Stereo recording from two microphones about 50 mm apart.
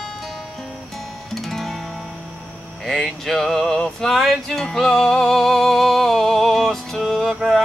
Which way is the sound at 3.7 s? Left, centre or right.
Centre.